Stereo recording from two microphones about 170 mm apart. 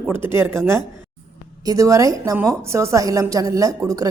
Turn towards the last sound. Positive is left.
turn(degrees=-20)  # may be behind; listen again after turning